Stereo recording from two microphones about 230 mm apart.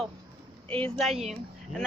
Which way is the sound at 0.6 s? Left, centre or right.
Right.